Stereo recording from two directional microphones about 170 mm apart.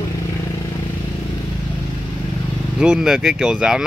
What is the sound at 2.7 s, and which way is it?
Speech, 5° right (ahead or behind).